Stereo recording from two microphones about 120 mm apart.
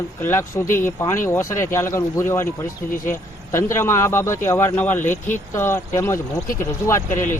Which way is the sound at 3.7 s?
20° left (ahead or behind).